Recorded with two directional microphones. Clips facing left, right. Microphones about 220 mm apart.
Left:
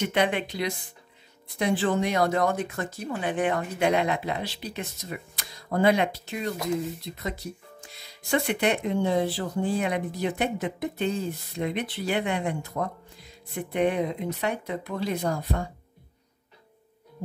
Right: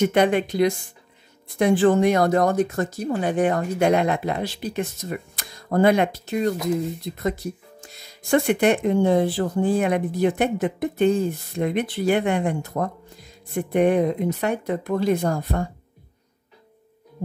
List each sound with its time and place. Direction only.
0.0 s speech: 45° right (ahead or behind)
7.8 s speech: 45° right (ahead or behind)